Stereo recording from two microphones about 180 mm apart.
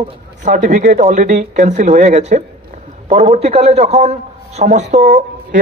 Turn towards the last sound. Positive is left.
turn(degrees=-45)  # may be behind; listen again after turning